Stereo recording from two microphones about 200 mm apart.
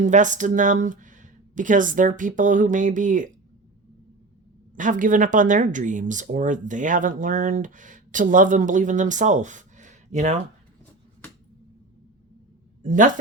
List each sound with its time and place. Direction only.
0.0 s speech: 40° right (ahead or behind)
4.8 s speech: 40° right (ahead or behind)
12.8 s speech: 40° right (ahead or behind)